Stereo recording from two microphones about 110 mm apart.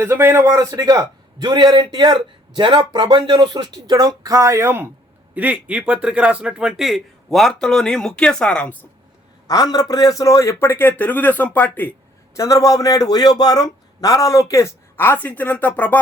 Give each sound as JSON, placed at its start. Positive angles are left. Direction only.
{"t": 0.0, "sound": "a man's voice", "side_deg": -25}
{"t": 9.5, "sound": "a man's voice", "side_deg": 40}
{"t": 12.4, "sound": "a man's voice", "side_deg": 30}